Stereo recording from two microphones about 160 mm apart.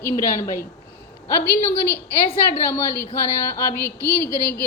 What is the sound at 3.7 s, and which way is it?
Speech, 15° left (ahead or behind).